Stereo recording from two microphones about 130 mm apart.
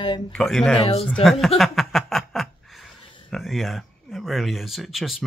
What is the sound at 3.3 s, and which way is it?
Speech, centre (ahead or behind).